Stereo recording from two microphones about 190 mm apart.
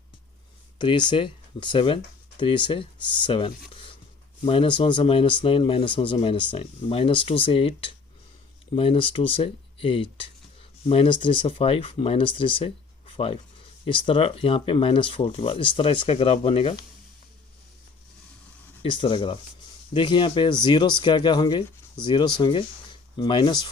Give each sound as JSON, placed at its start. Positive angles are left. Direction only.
{"t": 0.8, "sound": "speech", "side_deg": 25}
{"t": 18.8, "sound": "speech", "side_deg": 25}